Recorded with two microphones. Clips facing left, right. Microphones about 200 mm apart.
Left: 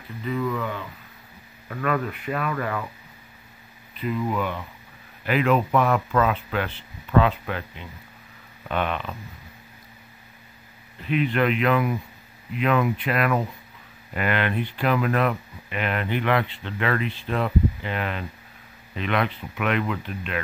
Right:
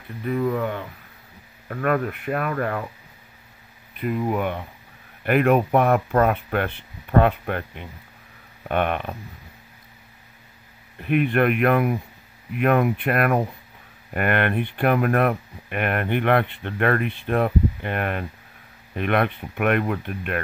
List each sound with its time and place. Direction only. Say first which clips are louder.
0.4 s speech: right 4 dB; 45° right (ahead or behind)
3.9 s a sound: right 2 dB; 55° right (ahead or behind)
4.3 s speech: right 3 dB; 55° right (ahead or behind)
11.0 s speech: right 3 dB; 55° right (ahead or behind)